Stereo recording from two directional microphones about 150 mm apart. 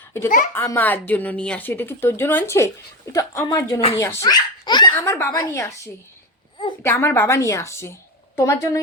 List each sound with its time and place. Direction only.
0.3 s a child's voice: 60° left (ahead or behind)
0.5 s speech: 15° left (ahead or behind)
4.9 s speech: 15° left (ahead or behind)